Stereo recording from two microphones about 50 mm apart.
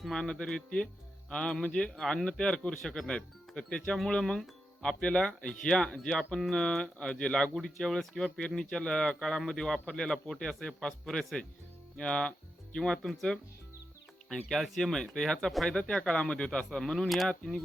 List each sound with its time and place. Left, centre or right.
0.1 s speech: centre
14.5 s speech: centre
15.8 s speech: left